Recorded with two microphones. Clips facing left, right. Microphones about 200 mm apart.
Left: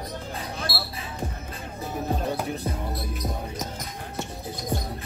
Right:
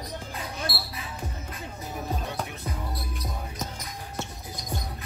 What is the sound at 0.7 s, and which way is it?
Basketball bounce, 25° right (ahead or behind).